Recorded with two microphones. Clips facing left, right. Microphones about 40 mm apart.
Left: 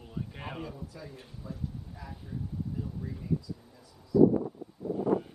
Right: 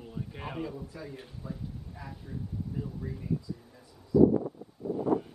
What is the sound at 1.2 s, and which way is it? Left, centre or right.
Speech, centre.